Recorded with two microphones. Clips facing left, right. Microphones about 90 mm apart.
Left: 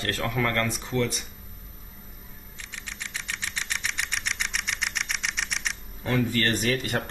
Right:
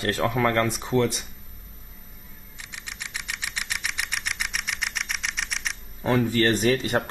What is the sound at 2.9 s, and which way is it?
Engine, 15° right (ahead or behind).